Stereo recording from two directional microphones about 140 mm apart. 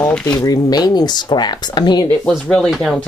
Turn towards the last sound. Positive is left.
turn(degrees=5)  # may be behind; listen again after turning